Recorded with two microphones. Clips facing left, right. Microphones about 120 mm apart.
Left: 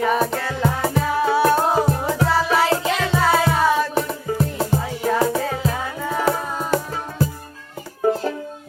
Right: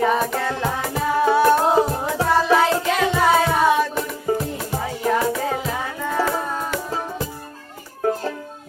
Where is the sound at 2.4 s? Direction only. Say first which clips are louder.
Right 1 dB; 20° right (ahead or behind).